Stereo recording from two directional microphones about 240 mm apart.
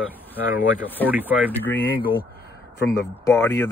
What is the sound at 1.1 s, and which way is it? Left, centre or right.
Speech, centre.